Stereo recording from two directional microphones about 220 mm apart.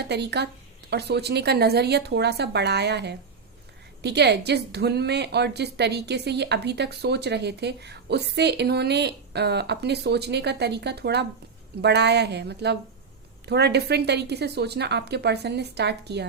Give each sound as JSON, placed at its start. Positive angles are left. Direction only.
{"t": 0.1, "sound": "a woman's voice", "side_deg": -50}